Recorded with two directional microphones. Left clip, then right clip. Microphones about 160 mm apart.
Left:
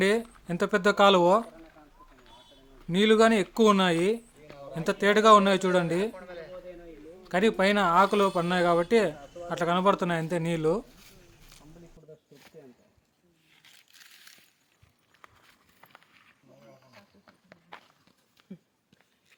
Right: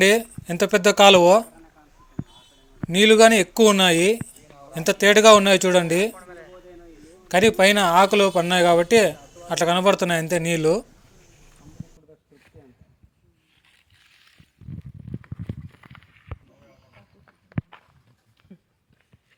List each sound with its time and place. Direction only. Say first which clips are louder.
0.0 s a man's voice: right 8 dB; centre (ahead or behind)
2.9 s a man's voice: right 8 dB; centre (ahead or behind)
7.3 s a man's voice: right 8 dB; centre (ahead or behind)
18.4 s a sound: left 2 dB; 25° left (ahead or behind)